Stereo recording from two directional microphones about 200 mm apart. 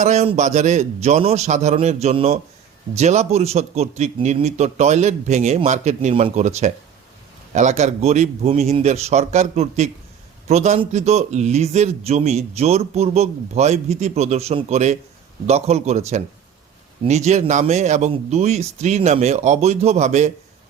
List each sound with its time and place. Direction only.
0.0 s a man's voice: 35° right (ahead or behind)